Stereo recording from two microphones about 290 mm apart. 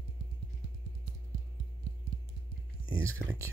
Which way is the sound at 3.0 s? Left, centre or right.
Centre.